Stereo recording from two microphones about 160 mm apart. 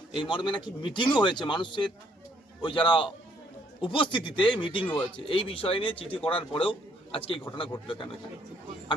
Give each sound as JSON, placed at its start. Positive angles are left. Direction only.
{"t": 0.2, "sound": "a man's voice", "side_deg": 30}